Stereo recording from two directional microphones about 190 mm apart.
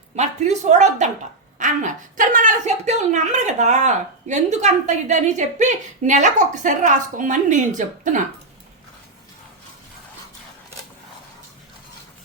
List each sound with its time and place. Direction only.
0.2 s a woman's voice: 35° right (ahead or behind)